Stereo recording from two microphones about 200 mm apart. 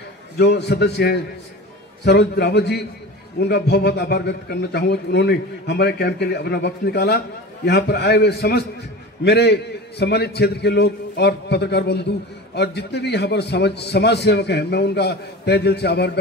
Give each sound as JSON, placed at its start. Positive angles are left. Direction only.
{"t": 0.4, "sound": "a man's voice", "side_deg": 55}